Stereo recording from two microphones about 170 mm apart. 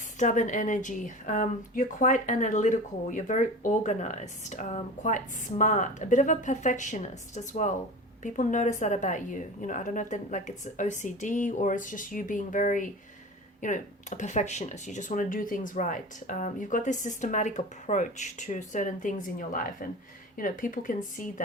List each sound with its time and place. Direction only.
0.2 s speech: 45° left (ahead or behind)